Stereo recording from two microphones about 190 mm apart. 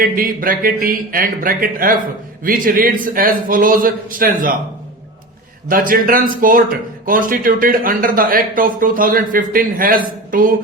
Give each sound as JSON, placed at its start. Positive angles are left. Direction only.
{"t": 0.0, "sound": "speech", "side_deg": -45}
{"t": 5.6, "sound": "speech", "side_deg": -50}